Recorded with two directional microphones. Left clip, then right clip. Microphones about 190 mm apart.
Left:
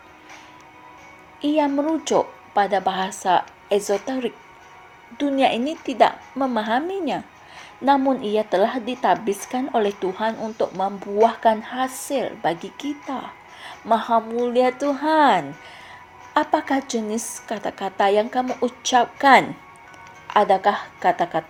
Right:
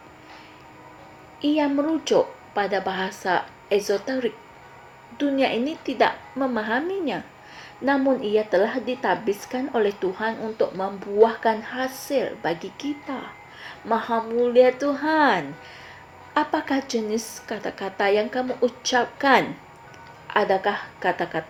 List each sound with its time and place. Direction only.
1.4 s speech: 45° left (ahead or behind)
9.2 s speech: 15° left (ahead or behind)
9.5 s speech: 45° left (ahead or behind)